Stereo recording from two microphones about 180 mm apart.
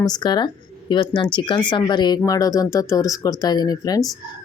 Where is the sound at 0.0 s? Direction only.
25° left (ahead or behind).